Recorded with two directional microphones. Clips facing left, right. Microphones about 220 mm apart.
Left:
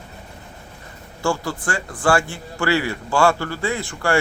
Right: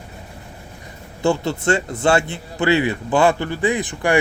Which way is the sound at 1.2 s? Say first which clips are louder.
Right 4 dB; 20° right (ahead or behind).